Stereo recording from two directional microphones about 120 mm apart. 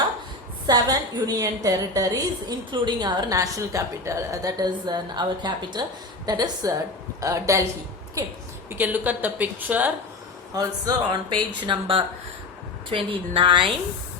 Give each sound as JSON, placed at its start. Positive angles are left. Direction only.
{"t": 0.7, "sound": "a woman's voice", "side_deg": -35}
{"t": 2.5, "sound": "a woman's voice", "side_deg": -40}
{"t": 8.7, "sound": "a woman's voice", "side_deg": -15}
{"t": 10.5, "sound": "a woman's voice", "side_deg": -30}